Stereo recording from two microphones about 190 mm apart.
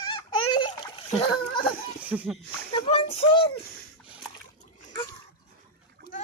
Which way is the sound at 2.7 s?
25° left (ahead or behind).